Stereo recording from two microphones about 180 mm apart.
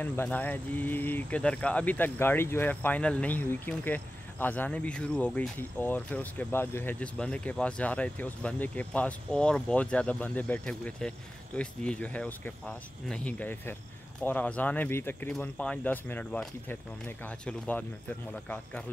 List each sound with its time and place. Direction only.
0.0 s speech: 10° left (ahead or behind)